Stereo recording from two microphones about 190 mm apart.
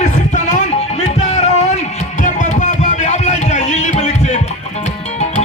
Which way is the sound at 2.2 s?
40° left (ahead or behind).